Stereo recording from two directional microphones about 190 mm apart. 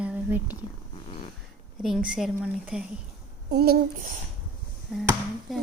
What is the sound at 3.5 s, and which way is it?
Child singing, 55° right (ahead or behind).